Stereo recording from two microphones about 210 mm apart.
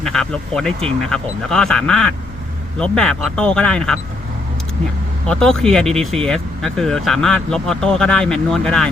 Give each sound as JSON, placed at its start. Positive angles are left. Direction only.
{"t": 0.0, "sound": "speech", "side_deg": 0}
{"t": 5.2, "sound": "speech", "side_deg": 5}